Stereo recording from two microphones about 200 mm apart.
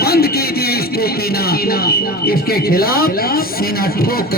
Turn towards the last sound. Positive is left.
turn(degrees=50)  # may be behind; listen again after turning